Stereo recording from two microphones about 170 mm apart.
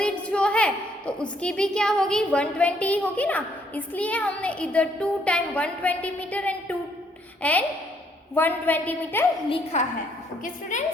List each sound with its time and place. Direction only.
0.0 s a woman's voice: 5° left (ahead or behind)
9.7 s a woman's voice: 40° left (ahead or behind)